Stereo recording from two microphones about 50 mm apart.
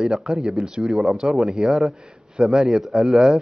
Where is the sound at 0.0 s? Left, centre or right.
Centre.